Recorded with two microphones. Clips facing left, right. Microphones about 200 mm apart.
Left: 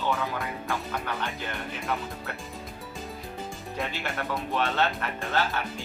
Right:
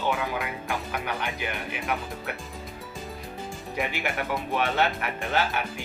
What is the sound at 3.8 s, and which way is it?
Speech, 15° right (ahead or behind).